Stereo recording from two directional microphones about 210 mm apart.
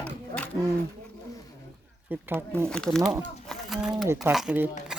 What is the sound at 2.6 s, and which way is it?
Speech, 5° left (ahead or behind).